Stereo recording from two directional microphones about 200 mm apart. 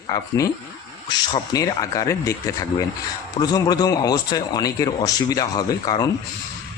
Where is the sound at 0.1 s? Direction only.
15° left (ahead or behind).